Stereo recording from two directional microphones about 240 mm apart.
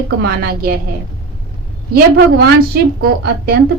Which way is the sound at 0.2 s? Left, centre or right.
Right.